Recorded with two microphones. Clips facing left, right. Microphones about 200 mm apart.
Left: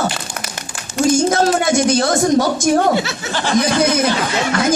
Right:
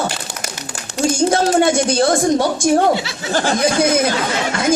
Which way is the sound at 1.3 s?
30° right (ahead or behind).